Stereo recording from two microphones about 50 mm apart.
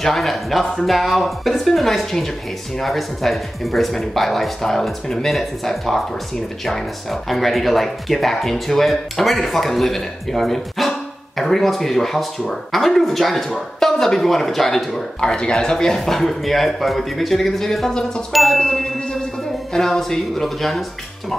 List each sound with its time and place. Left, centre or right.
0.0 s speech: centre
15.1 s speech: centre